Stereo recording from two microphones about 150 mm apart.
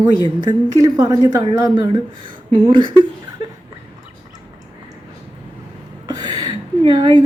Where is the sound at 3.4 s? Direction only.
40° right (ahead or behind).